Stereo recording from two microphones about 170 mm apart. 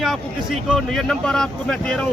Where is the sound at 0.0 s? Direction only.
Centre (ahead or behind).